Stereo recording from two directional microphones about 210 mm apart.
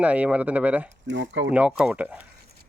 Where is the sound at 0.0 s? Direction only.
5° right (ahead or behind).